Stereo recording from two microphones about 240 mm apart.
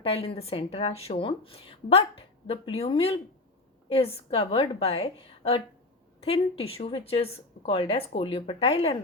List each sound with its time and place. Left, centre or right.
0.0 s speech: left